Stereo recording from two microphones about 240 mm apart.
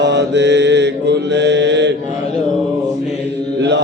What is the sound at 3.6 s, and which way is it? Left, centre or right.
Mantra, right.